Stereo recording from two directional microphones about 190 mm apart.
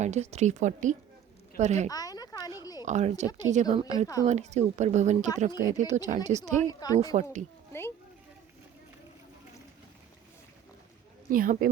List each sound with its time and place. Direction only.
0.0 s a woman's voice: 35° right (ahead or behind)
1.9 s a sound: 20° left (ahead or behind)
2.8 s a woman's voice: 35° right (ahead or behind)
3.9 s a woman's voice: 20° left (ahead or behind)
4.3 s a woman's voice: 35° right (ahead or behind)
6.7 s a woman's voice: 20° left (ahead or behind)
7.0 s a woman's voice: 35° right (ahead or behind)
7.7 s a sound: 15° left (ahead or behind)
11.3 s speech: 45° right (ahead or behind)